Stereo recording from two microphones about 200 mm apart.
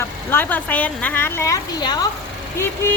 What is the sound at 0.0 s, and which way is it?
A woman's voice, 10° left (ahead or behind).